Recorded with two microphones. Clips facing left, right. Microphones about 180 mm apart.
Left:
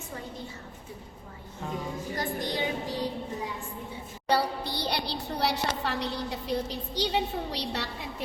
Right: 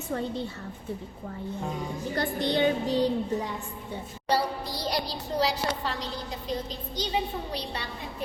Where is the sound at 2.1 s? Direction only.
70° right (ahead or behind).